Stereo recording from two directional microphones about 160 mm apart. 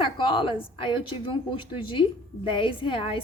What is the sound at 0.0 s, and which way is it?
A woman's voice, 35° left (ahead or behind).